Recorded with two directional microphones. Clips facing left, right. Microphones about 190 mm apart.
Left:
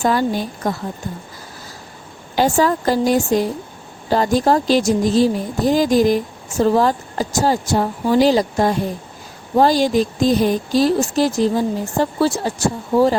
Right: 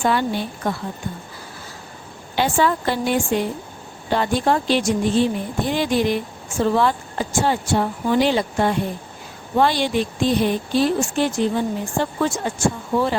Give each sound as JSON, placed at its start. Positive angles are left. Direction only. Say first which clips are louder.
{"t": 0.0, "sound": "speech", "louder": "left 3 dB", "side_deg": 40}
{"t": 2.3, "sound": "speech", "louder": "left 3 dB", "side_deg": 40}